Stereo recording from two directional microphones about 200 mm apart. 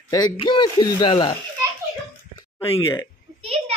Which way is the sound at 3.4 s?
30° right (ahead or behind).